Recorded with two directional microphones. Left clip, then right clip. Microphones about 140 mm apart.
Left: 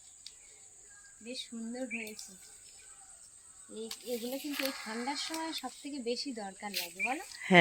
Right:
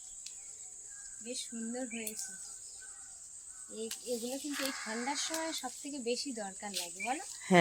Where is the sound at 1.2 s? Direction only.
5° left (ahead or behind).